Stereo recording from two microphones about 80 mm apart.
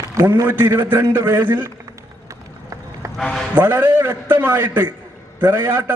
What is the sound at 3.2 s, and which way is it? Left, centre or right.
Speech, centre.